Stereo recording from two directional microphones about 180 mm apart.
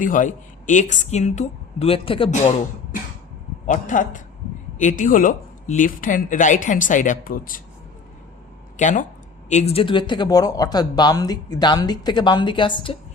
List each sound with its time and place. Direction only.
0.0 s speech: 45° left (ahead or behind)
3.7 s speech: 45° left (ahead or behind)
8.8 s speech: 45° left (ahead or behind); by 13.0 s 30° left (ahead or behind)